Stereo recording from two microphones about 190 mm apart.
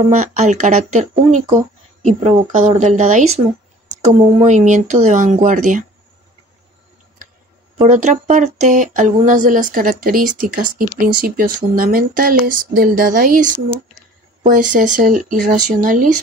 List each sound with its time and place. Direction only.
0.2 s speech: 40° right (ahead or behind)
7.7 s speech: 35° right (ahead or behind)